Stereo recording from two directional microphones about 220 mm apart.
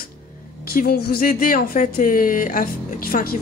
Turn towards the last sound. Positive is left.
turn(degrees=40)  # may be behind; listen again after turning